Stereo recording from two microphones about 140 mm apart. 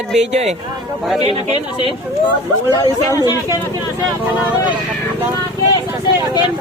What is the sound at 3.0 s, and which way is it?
Speech, 20° left (ahead or behind).